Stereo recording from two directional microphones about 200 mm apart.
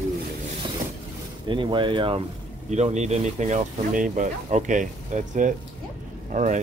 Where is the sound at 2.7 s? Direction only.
35° right (ahead or behind).